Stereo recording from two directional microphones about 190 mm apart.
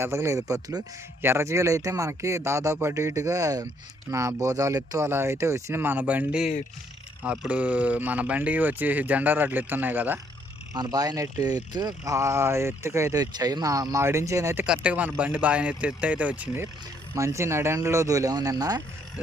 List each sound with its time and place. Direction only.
0.0 s speech: 15° right (ahead or behind)